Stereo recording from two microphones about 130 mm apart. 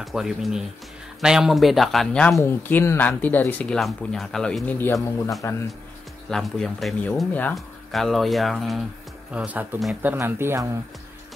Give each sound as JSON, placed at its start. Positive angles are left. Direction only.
{"t": 0.0, "sound": "speech", "side_deg": 0}
{"t": 2.4, "sound": "speech", "side_deg": 20}
{"t": 3.8, "sound": "speech", "side_deg": 0}
{"t": 6.3, "sound": "speech", "side_deg": 0}